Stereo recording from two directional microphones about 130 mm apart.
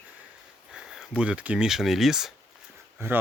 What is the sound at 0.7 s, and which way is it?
Speech, 5° right (ahead or behind).